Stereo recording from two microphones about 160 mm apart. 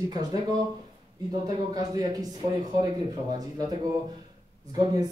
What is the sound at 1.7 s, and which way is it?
Speech, 25° right (ahead or behind).